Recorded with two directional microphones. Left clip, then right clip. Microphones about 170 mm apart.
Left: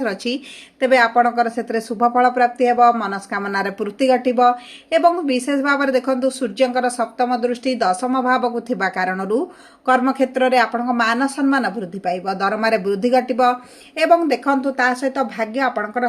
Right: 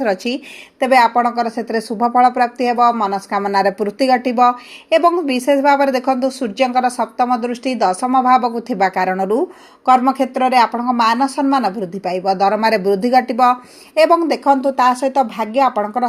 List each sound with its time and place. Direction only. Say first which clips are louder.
0.0 s speech: right 4 dB; 20° right (ahead or behind)